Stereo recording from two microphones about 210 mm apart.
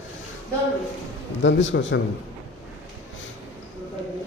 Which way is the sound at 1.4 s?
60° left (ahead or behind).